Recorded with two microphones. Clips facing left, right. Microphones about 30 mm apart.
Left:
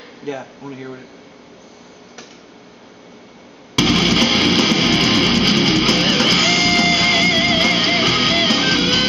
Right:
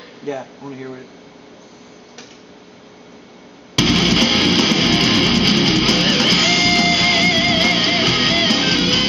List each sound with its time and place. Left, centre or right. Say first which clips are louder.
0.2 s speech: right 1 dB; centre
3.7 s music: even; centre